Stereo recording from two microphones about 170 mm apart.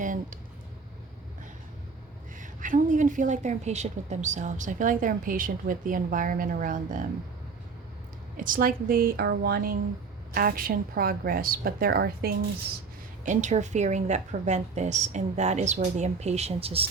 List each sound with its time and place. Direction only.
0.0 s a sound: 50° right (ahead or behind)
2.4 s a woman's voice: 50° right (ahead or behind)
8.4 s a woman's voice: 55° right (ahead or behind)
13.2 s a woman's voice: 45° right (ahead or behind)